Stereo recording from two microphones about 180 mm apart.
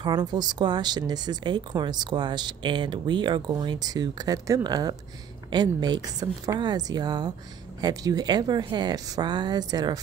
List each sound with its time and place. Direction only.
0.0 s speech: 25° right (ahead or behind)